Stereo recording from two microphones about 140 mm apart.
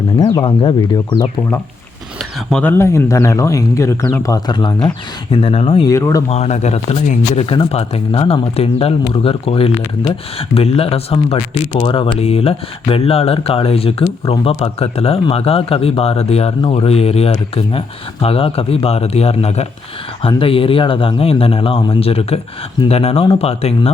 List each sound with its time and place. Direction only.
0.2 s speech: 30° left (ahead or behind)
1.4 s speech: 10° left (ahead or behind); by 4.9 s 30° left (ahead or behind)
5.3 s speech: 40° left (ahead or behind)
5.8 s speech: 20° left (ahead or behind)
6.3 s speech: 50° left (ahead or behind)